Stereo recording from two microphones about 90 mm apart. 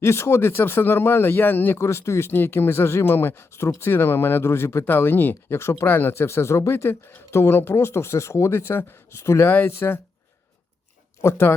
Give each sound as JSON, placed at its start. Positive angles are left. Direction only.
{"t": 0.0, "sound": "speech", "side_deg": 30}
{"t": 11.2, "sound": "speech", "side_deg": 25}